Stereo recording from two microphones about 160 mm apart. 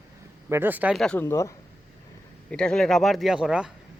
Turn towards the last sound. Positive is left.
turn(degrees=-5)  # may be behind; listen again after turning